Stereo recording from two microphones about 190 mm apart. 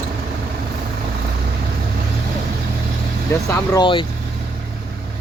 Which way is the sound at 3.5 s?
25° left (ahead or behind).